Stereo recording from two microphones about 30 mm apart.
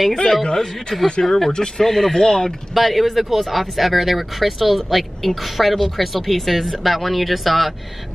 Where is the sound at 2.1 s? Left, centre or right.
Left.